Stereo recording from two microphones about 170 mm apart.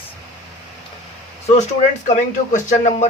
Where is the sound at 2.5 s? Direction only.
45° left (ahead or behind).